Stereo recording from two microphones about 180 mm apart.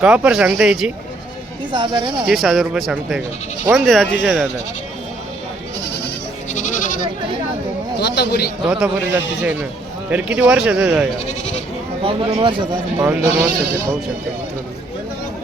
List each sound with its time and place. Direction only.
0.0 s speech: 5° right (ahead or behind)
1.7 s speech: 25° right (ahead or behind)
2.2 s speech: centre (ahead or behind)
5.8 s goat: 70° left (ahead or behind)
6.5 s speech: 45° left (ahead or behind)
7.9 s a man's voice: 65° left (ahead or behind)
8.6 s speech: 5° right (ahead or behind)
12.0 s speech: 30° right (ahead or behind)